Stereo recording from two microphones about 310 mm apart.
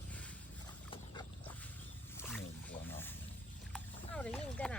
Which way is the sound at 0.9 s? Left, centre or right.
Centre.